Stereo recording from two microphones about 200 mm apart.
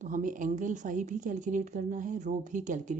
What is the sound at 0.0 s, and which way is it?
A woman's voice, 40° right (ahead or behind).